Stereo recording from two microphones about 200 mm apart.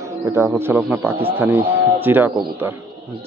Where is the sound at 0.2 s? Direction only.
10° right (ahead or behind).